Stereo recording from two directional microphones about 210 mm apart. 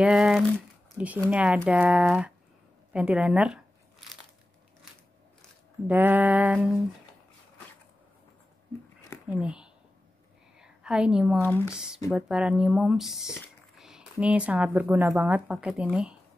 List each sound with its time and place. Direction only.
0.0 s speech: centre (ahead or behind)
5.9 s a sound: 10° right (ahead or behind)
9.3 s speech: 5° right (ahead or behind)
10.6 s a sound: 5° right (ahead or behind)
11.4 s speech: 10° left (ahead or behind)
11.7 s speech: 5° right (ahead or behind)